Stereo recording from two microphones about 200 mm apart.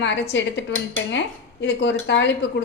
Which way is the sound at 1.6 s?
60° left (ahead or behind).